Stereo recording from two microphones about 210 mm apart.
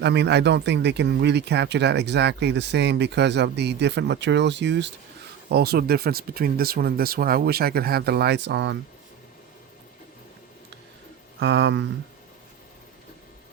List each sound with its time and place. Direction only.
0.0 s speech: 55° right (ahead or behind)
11.3 s speech: 55° right (ahead or behind)